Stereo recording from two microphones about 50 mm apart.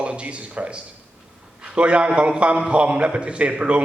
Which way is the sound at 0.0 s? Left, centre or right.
Right.